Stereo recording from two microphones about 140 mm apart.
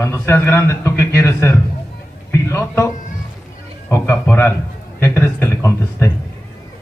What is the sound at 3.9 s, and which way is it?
A man's voice, 20° left (ahead or behind).